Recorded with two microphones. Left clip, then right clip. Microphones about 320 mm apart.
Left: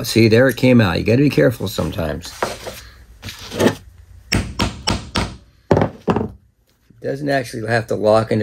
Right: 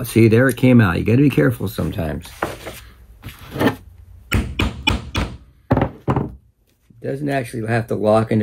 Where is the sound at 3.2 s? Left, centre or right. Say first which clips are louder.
Left 5 dB; left.